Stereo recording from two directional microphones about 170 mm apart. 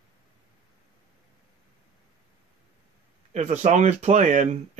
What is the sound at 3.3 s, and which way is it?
Speech, 40° right (ahead or behind).